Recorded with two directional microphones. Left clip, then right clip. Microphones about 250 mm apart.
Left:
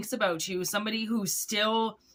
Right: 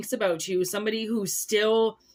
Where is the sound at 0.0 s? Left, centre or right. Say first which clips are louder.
Right 3 dB; centre.